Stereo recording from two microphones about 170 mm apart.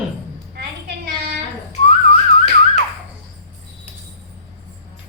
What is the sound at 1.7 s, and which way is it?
Whistling, 40° left (ahead or behind).